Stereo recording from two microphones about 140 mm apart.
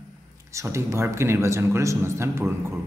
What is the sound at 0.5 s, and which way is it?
A man's voice, 20° right (ahead or behind).